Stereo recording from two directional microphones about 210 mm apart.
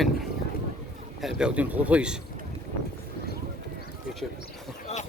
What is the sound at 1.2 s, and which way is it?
Speech, 5° right (ahead or behind).